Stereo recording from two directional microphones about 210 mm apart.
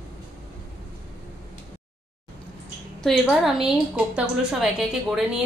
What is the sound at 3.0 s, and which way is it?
A woman's voice, centre (ahead or behind).